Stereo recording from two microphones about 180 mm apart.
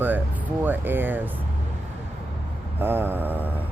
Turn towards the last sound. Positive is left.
turn(degrees=-10)  # may be behind; listen again after turning